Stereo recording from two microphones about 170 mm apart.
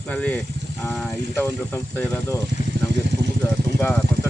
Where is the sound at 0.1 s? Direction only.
10° left (ahead or behind).